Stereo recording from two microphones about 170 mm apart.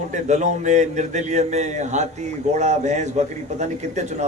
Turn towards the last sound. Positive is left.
turn(degrees=-45)  # may be behind; listen again after turning